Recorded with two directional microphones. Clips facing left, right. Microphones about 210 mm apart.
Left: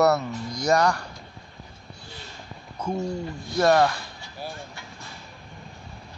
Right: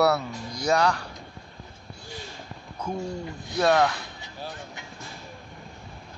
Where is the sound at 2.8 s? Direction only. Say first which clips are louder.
Left 3 dB; 10° left (ahead or behind).